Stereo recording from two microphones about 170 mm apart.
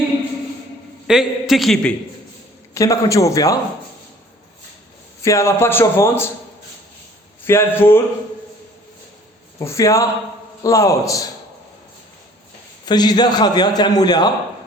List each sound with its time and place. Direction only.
1.0 s a man's voice: centre (ahead or behind)
2.7 s a man's voice: 20° left (ahead or behind)
5.2 s a man's voice: 20° left (ahead or behind)
7.4 s a man's voice: 15° left (ahead or behind)
9.6 s a man's voice: 20° left (ahead or behind)
12.8 s a man's voice: 25° left (ahead or behind)